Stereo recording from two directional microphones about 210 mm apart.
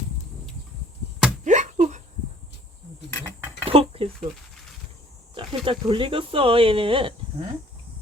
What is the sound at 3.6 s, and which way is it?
Dishes, 25° right (ahead or behind).